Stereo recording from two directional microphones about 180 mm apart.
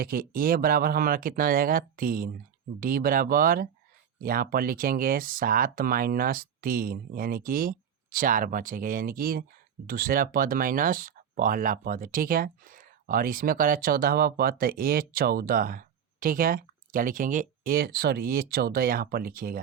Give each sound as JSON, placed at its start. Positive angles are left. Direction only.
{"t": 0.0, "sound": "speech", "side_deg": -55}